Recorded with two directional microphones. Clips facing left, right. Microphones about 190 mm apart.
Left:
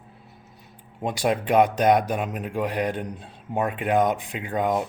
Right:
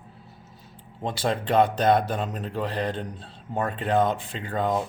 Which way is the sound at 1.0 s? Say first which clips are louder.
Left 3 dB; 15° left (ahead or behind).